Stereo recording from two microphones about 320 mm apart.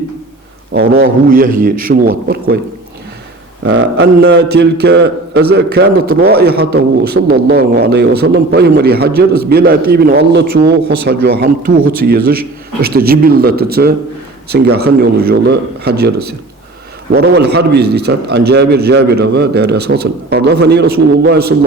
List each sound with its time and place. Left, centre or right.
0.7 s a man's voice: right
3.6 s a man's voice: right